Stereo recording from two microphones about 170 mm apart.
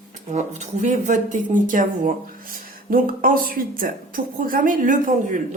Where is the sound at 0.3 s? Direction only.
45° right (ahead or behind).